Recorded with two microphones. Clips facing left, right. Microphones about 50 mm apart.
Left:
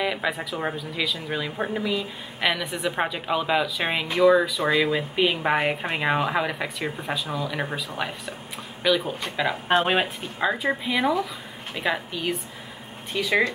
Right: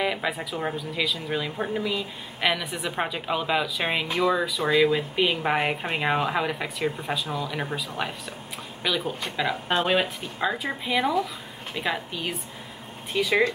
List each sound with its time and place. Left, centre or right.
0.0 s speech: centre
8.8 s speech: centre
9.7 s speech: left
10.4 s speech: centre